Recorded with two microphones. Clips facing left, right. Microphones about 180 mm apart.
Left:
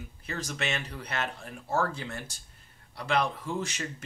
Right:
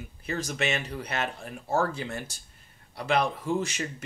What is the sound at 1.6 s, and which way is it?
Speech, 25° right (ahead or behind).